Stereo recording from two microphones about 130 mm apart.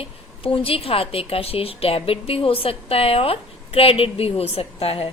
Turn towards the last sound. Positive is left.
turn(degrees=50)  # may be behind; listen again after turning